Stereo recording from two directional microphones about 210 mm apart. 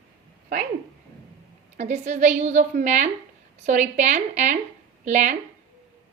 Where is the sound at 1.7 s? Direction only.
35° right (ahead or behind).